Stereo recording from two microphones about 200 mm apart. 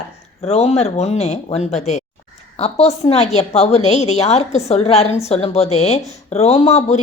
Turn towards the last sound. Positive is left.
turn(degrees=30)  # may be behind; listen again after turning